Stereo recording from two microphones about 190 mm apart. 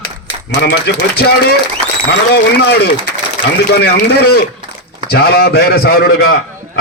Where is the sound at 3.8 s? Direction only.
60° left (ahead or behind).